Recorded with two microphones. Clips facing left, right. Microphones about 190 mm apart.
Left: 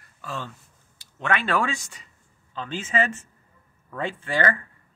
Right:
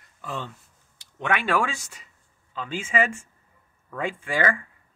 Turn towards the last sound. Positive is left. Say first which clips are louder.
# even
turn(degrees=-10)  # may be behind; listen again after turning